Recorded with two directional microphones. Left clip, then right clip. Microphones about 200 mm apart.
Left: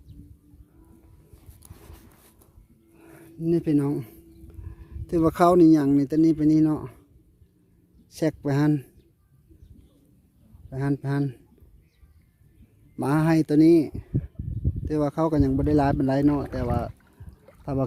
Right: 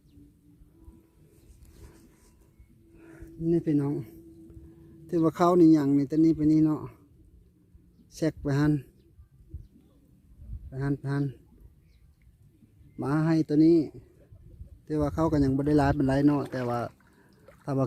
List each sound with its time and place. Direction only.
2.9 s wild animals: 20° left (ahead or behind)
3.2 s a sound: 30° left (ahead or behind)
5.0 s speech: 25° left (ahead or behind)
8.1 s speech: 20° left (ahead or behind)
10.7 s speech: 25° left (ahead or behind)
13.0 s speech: 30° left (ahead or behind)
14.8 s speech: 20° left (ahead or behind)